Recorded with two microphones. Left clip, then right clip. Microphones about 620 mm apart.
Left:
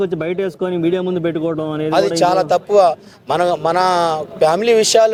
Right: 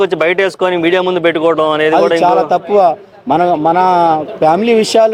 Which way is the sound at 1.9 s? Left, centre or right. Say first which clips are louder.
Right 1 dB; left.